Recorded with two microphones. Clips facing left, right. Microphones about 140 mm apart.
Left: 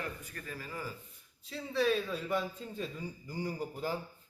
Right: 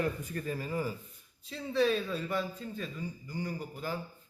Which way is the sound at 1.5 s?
5° left (ahead or behind).